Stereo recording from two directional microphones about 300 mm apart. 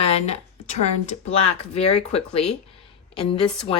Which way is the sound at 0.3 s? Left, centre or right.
Left.